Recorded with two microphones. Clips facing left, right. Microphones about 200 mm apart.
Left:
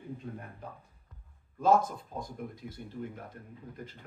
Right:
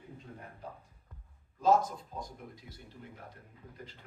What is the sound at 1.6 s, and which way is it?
Speech, 55° left (ahead or behind).